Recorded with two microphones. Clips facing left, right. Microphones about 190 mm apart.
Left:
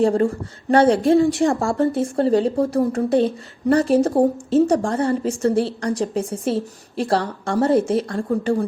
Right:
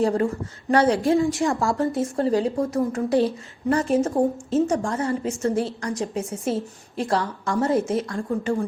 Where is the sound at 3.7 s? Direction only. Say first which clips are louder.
Left 5 dB; 35° left (ahead or behind).